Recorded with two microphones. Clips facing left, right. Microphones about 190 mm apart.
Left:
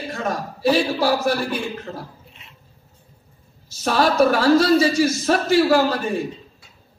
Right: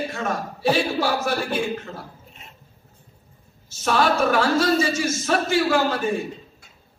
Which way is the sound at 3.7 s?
40° left (ahead or behind).